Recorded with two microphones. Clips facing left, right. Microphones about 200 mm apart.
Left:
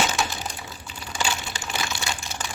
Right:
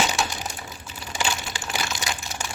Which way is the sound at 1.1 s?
10° right (ahead or behind).